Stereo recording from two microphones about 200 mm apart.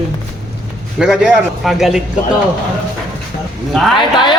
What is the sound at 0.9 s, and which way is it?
A man's voice, centre (ahead or behind).